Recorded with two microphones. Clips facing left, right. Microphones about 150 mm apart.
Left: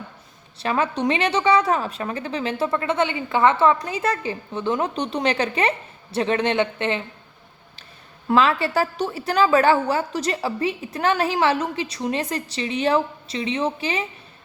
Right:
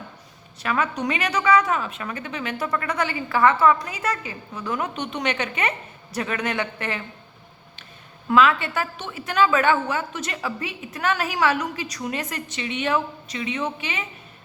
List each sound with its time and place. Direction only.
0.6 s a woman's voice: 30° left (ahead or behind)
8.3 s a woman's voice: 35° left (ahead or behind)